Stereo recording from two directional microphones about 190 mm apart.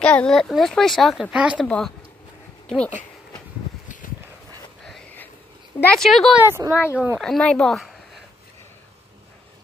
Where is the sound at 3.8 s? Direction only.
45° left (ahead or behind).